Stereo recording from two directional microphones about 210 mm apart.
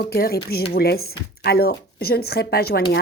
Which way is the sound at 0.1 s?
50° left (ahead or behind).